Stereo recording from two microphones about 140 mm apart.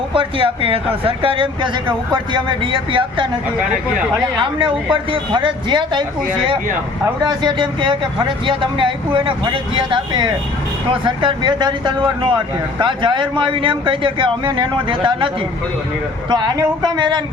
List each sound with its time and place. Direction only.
0.1 s speech: 40° right (ahead or behind)
4.4 s speech: 35° right (ahead or behind)
7.3 s speech: 35° right (ahead or behind)
16.3 s speech: 25° right (ahead or behind)